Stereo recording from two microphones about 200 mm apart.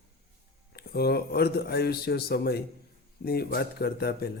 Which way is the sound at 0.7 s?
50° left (ahead or behind).